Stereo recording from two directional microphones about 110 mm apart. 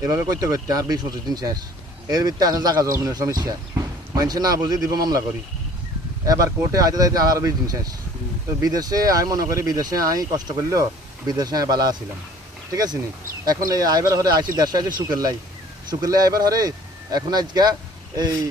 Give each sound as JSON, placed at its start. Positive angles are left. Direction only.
{"t": 0.0, "sound": "speech", "side_deg": -30}
{"t": 6.2, "sound": "speech", "side_deg": -30}